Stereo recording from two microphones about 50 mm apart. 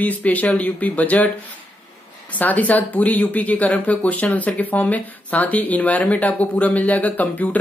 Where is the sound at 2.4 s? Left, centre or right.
Left.